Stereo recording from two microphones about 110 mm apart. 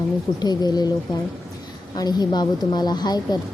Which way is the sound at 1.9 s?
40° left (ahead or behind).